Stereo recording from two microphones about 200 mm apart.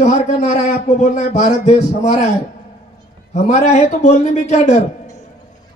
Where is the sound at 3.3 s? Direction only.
35° left (ahead or behind).